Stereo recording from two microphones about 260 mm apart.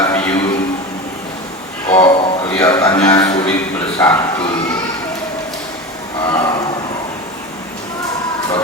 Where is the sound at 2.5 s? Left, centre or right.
Centre.